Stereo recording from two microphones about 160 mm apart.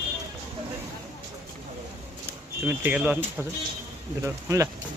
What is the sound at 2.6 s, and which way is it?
Speech, 10° right (ahead or behind).